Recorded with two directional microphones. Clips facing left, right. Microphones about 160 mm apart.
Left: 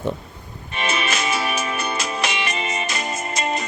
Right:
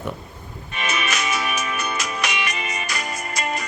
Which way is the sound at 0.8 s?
30° left (ahead or behind).